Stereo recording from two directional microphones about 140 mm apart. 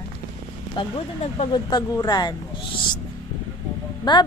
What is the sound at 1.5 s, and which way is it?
Speech, 30° left (ahead or behind).